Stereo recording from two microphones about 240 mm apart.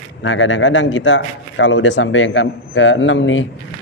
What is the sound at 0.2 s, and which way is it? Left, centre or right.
A man's voice, left.